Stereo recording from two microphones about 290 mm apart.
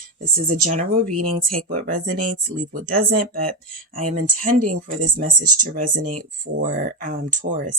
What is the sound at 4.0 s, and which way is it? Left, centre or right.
Speech, right.